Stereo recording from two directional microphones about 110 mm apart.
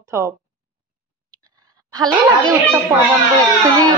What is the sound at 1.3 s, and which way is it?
Clicking, 35° right (ahead or behind).